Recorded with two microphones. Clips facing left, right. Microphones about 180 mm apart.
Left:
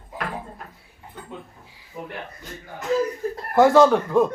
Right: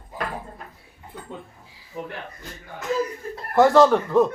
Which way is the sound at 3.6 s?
Centre (ahead or behind).